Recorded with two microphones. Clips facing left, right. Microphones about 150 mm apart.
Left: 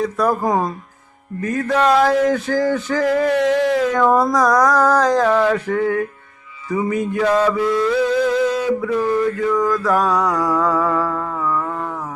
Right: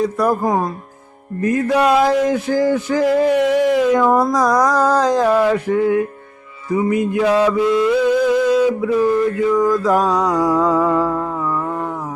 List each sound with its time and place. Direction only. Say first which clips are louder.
0.0 s speech: right 1 dB; 10° right (ahead or behind)
7.6 s a sound: right 3 dB; 15° right (ahead or behind)
9.5 s mantra: right 4 dB; 10° right (ahead or behind)